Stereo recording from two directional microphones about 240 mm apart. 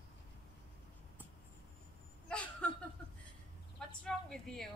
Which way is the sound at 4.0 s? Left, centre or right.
Centre.